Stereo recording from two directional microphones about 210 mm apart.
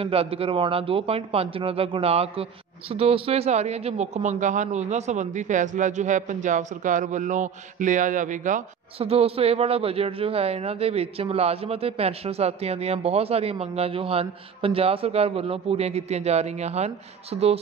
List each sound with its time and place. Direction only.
0.0 s speech: 25° right (ahead or behind)